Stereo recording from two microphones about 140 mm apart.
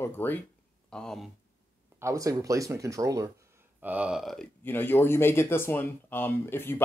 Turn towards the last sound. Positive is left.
turn(degrees=15)  # may be behind; listen again after turning